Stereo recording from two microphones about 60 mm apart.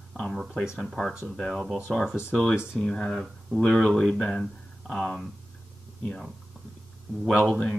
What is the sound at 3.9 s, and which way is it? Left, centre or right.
Speech, centre.